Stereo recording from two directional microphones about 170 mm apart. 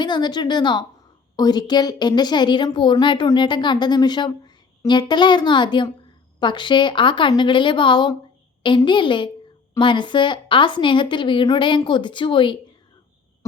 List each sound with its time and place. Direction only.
0.0 s a woman's voice: 25° left (ahead or behind)